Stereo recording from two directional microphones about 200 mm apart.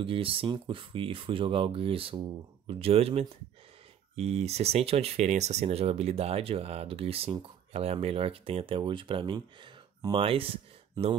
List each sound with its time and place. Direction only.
0.0 s speech: 25° right (ahead or behind)